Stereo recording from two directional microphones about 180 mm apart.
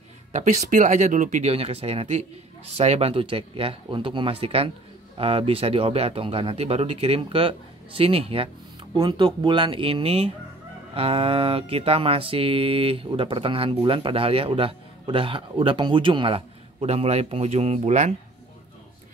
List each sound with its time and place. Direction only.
0.3 s speech: 40° right (ahead or behind)